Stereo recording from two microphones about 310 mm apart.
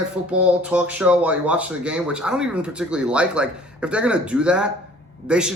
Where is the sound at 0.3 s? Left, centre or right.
Centre.